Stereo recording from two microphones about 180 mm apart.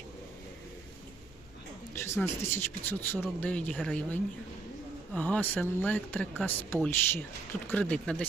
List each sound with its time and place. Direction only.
2.0 s speech: 15° left (ahead or behind)